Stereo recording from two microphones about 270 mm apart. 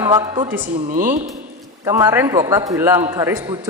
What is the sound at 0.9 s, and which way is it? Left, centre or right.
Music, right.